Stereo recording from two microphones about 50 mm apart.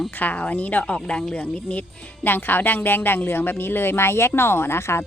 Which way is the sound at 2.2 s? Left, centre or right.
Left.